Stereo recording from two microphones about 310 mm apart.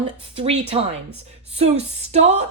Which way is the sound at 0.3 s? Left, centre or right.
Centre.